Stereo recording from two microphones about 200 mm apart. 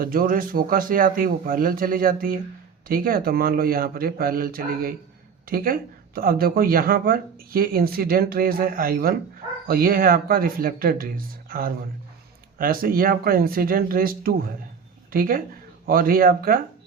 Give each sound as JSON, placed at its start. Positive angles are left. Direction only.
{"t": 0.0, "sound": "speech", "side_deg": -45}